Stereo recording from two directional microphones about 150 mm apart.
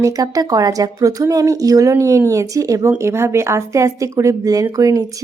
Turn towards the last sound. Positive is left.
turn(degrees=-20)  # may be behind; listen again after turning